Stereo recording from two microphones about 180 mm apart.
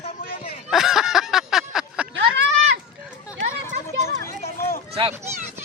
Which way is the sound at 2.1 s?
90° right.